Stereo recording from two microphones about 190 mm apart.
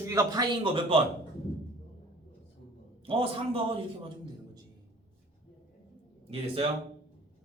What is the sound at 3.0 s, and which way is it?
Speech, 30° right (ahead or behind).